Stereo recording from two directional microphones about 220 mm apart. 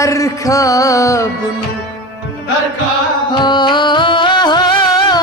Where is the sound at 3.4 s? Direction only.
20° left (ahead or behind).